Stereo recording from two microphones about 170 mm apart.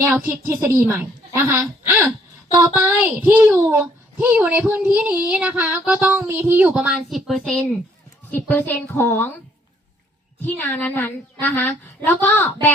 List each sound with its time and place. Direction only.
0.0 s a child's voice: 15° right (ahead or behind); by 9.3 s 10° left (ahead or behind)
10.4 s a woman's voice: 10° left (ahead or behind)